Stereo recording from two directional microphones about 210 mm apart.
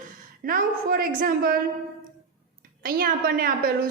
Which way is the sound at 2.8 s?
45° right (ahead or behind).